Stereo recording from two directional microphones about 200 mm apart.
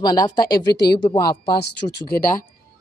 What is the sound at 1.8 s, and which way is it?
Speech, 30° left (ahead or behind).